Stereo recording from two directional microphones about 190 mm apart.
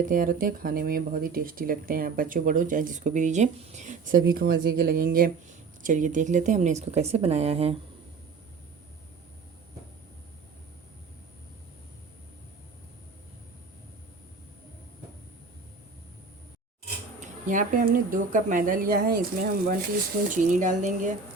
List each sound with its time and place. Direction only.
0.0 s a woman's voice: 45° right (ahead or behind)
17.2 s speech: 45° right (ahead or behind)
20.3 s speech: 40° right (ahead or behind)